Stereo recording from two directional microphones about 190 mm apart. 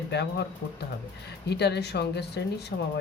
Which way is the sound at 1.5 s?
60° left (ahead or behind).